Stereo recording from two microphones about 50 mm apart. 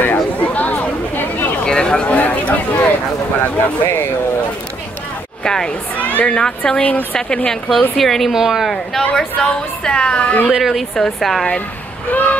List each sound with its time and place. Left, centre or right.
0.0 s chatter: left
1.6 s a sound: centre; by 2.9 s left
5.4 s speech: centre
5.9 s a woman's voice: left
8.0 s speech: centre
8.4 s speech: centre
9.1 s a woman's voice: centre
10.6 s speech: centre
12.1 s vehicle: left